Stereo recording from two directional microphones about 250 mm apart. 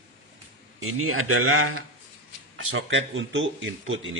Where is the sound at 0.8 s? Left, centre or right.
Right.